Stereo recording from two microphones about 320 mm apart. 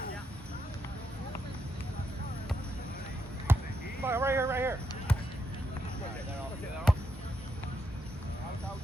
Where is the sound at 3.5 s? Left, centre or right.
Centre.